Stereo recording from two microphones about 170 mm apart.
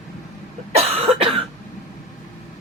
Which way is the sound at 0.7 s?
35° right (ahead or behind).